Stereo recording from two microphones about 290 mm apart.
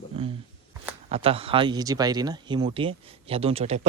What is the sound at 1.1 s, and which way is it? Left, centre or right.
Speech, centre.